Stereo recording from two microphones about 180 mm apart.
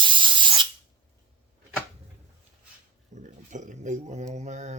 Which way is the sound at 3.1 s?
45° right (ahead or behind).